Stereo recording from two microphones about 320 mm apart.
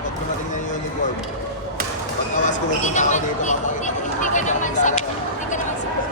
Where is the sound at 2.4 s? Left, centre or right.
Left.